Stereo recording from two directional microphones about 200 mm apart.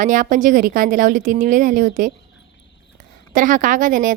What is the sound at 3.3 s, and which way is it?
Speech, 40° right (ahead or behind).